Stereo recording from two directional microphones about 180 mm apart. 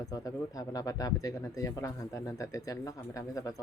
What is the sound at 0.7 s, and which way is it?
Speech, 20° left (ahead or behind).